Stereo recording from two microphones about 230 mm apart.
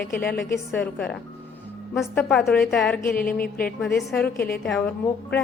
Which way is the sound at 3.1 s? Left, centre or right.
Left.